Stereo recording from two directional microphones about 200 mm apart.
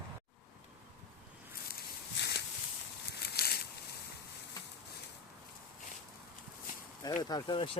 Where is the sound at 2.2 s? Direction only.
55° left (ahead or behind).